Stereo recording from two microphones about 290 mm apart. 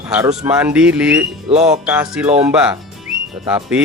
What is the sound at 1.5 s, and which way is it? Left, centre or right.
Music, right.